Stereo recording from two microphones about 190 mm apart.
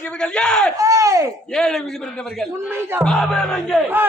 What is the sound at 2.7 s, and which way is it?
Speech, 10° right (ahead or behind).